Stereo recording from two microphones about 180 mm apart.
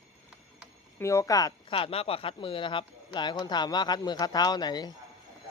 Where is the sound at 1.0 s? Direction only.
15° left (ahead or behind).